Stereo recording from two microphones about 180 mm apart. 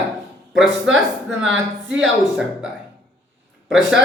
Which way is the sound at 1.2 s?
90° right.